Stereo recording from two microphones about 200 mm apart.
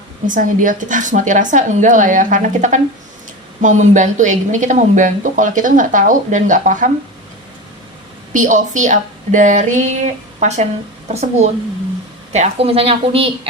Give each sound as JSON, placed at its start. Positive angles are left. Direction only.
{"t": 0.3, "sound": "speech", "side_deg": -40}
{"t": 8.3, "sound": "a woman's voice", "side_deg": -40}